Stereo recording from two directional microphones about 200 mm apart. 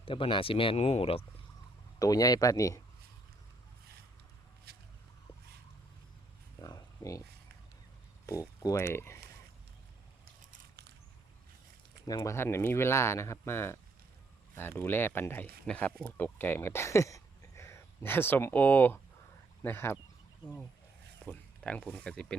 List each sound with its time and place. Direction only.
0.0 s speech: 25° left (ahead or behind)
2.0 s speech: 20° left (ahead or behind)
4.7 s a sound: 55° right (ahead or behind)
6.6 s a sound: 20° left (ahead or behind)
8.3 s speech: 15° left (ahead or behind)
12.0 s speech: 15° left (ahead or behind)
21.2 s zipper: 5° left (ahead or behind)
21.9 s speech: 5° left (ahead or behind)